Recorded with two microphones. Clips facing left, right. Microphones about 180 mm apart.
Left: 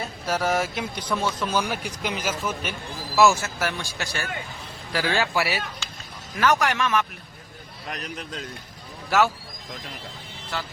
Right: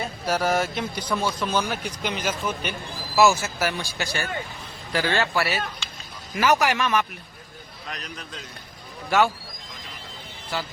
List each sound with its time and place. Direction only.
0.3 s a man's voice: centre (ahead or behind)
6.3 s a man's voice: 10° right (ahead or behind)
9.0 s speech: 5° left (ahead or behind)
10.5 s a man's voice: 5° right (ahead or behind)